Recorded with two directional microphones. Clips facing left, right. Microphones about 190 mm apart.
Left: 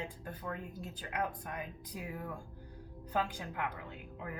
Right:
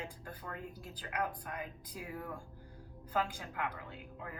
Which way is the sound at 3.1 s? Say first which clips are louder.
Left 1 dB; 20° left (ahead or behind).